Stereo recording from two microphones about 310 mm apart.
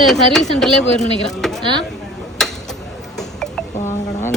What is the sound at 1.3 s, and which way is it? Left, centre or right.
Chop, centre.